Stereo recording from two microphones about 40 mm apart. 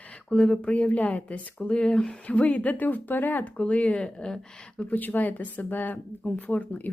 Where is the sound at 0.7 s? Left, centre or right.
Left.